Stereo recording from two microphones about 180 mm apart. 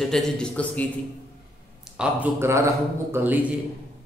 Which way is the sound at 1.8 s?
5° right (ahead or behind).